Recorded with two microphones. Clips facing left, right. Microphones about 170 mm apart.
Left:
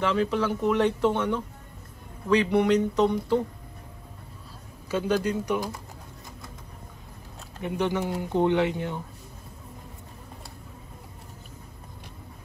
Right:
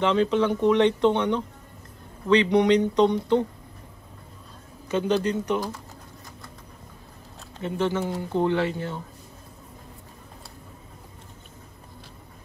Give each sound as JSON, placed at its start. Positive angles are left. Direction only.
{"t": 0.0, "sound": "speech", "side_deg": 5}
{"t": 4.8, "sound": "speech", "side_deg": 10}
{"t": 7.6, "sound": "speech", "side_deg": 15}